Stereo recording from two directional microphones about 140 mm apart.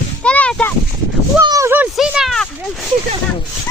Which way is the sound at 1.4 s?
20° right (ahead or behind).